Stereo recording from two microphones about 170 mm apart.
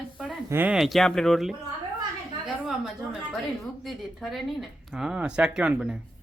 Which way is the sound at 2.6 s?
5° right (ahead or behind).